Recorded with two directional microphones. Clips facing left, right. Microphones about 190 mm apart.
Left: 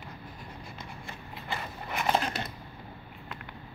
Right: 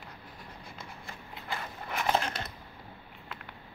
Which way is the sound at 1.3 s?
Centre (ahead or behind).